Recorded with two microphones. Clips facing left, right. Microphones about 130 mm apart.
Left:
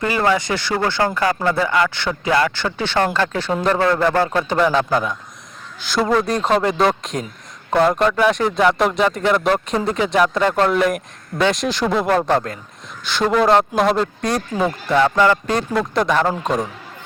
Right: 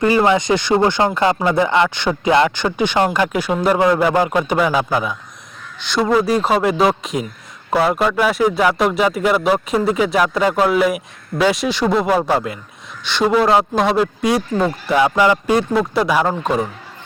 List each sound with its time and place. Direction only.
0.0 s speech: 20° right (ahead or behind); by 16.6 s 5° right (ahead or behind)